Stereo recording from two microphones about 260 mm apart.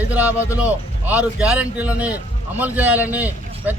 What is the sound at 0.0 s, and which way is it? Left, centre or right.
A man's voice, centre.